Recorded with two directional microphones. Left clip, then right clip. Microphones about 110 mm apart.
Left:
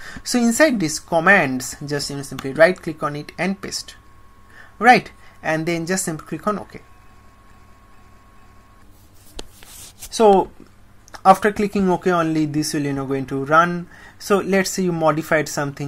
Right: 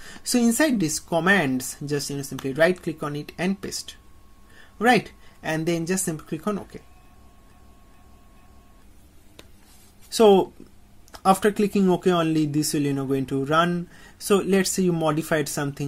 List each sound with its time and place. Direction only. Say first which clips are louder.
0.0 s speech: left 3 dB; 15° right (ahead or behind)
10.1 s speech: left 3 dB; 40° right (ahead or behind)
11.1 s speech: left 6 dB; 25° right (ahead or behind)